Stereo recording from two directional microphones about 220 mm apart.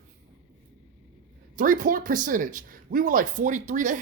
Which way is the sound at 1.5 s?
40° right (ahead or behind).